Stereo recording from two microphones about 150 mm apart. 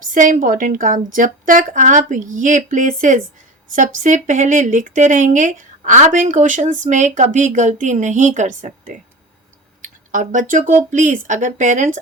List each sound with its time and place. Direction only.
0.1 s speech: 60° right (ahead or behind)
9.8 s a sound: 60° right (ahead or behind)
10.5 s speech: 55° right (ahead or behind)